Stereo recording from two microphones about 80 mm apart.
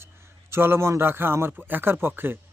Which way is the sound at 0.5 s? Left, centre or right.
Right.